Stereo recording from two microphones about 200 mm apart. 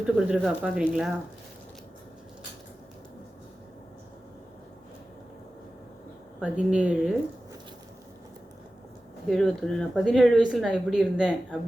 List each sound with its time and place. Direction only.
0.0 s a woman's voice: 5° right (ahead or behind)
6.4 s speech: 5° right (ahead or behind)
9.2 s a woman's voice: centre (ahead or behind)